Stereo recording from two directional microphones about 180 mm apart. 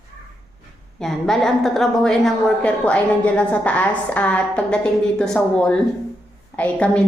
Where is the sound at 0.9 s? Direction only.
Centre (ahead or behind).